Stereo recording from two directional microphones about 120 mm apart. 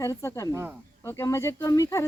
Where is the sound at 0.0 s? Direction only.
25° left (ahead or behind).